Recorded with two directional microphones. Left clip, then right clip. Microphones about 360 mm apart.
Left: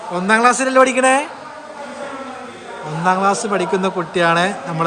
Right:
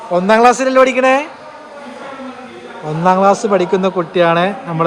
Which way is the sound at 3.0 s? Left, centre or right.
Centre.